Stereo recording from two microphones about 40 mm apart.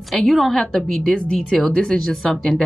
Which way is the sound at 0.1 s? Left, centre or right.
Centre.